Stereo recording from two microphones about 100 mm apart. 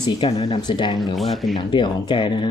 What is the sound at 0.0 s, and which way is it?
Speech, 50° left (ahead or behind).